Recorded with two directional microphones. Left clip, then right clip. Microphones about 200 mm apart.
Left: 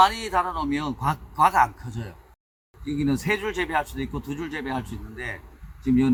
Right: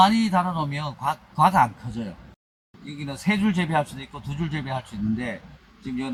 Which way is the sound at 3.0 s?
5° left (ahead or behind).